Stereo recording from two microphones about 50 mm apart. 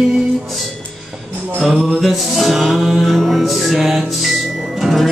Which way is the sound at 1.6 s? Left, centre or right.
Centre.